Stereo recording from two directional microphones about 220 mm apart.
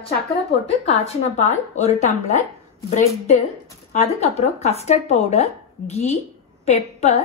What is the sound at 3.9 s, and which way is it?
A woman's voice, 30° left (ahead or behind).